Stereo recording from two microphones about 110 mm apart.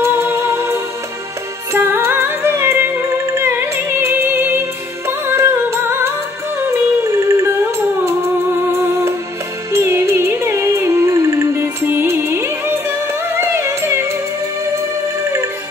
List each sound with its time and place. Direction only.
0.0 s music: 20° right (ahead or behind)